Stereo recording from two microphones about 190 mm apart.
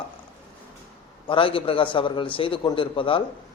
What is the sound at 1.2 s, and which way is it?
A man's voice, 25° left (ahead or behind).